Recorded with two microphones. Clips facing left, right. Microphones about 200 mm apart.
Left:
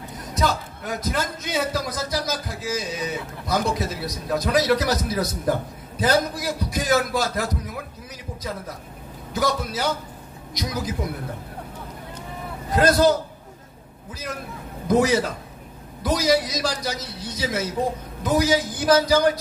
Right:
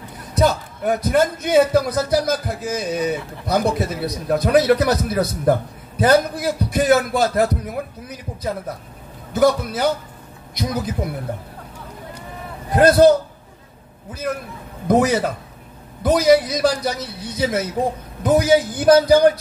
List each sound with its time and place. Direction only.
0.4 s a man's voice: 55° right (ahead or behind)
12.7 s speech: 55° right (ahead or behind)
14.9 s speech: 55° right (ahead or behind)